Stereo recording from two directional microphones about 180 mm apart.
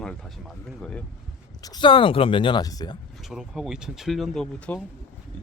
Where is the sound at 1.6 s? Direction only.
25° left (ahead or behind).